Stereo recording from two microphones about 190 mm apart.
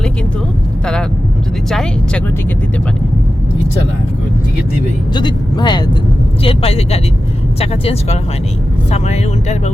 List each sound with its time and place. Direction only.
1.7 s speech: 5° left (ahead or behind)
5.1 s speech: 25° left (ahead or behind)